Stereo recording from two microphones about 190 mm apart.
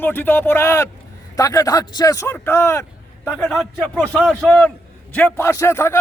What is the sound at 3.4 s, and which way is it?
A man's voice, centre (ahead or behind).